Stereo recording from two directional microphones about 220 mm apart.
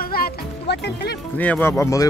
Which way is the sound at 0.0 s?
45° left (ahead or behind).